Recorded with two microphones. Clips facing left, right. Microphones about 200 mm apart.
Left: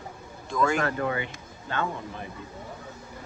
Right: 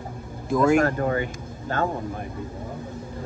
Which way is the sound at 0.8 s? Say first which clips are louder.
Right 6 dB; 45° right (ahead or behind).